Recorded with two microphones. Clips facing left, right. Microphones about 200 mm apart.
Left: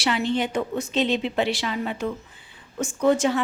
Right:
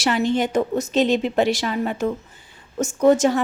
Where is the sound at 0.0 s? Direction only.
45° right (ahead or behind).